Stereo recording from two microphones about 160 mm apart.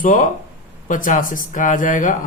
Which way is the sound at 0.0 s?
55° left (ahead or behind).